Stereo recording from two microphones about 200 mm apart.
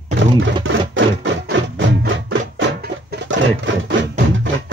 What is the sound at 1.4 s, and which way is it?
Music, 50° right (ahead or behind).